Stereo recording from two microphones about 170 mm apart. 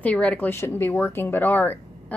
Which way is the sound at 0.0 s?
5° left (ahead or behind).